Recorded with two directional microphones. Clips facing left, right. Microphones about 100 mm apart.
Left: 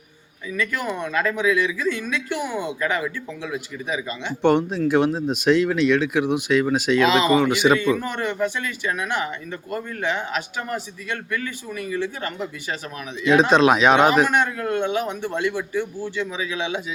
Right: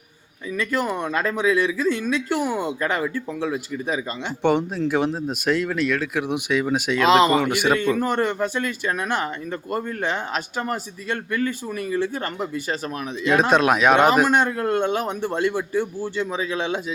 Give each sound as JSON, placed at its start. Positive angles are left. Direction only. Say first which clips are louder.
{"t": 0.5, "sound": "speech", "louder": "right 2 dB", "side_deg": -35}
{"t": 4.4, "sound": "speech", "louder": "left 2 dB", "side_deg": -10}
{"t": 7.1, "sound": "speech", "louder": "right 1 dB", "side_deg": -50}
{"t": 13.5, "sound": "speech", "louder": "even", "side_deg": -5}
{"t": 14.3, "sound": "speech", "louder": "right 2 dB", "side_deg": -35}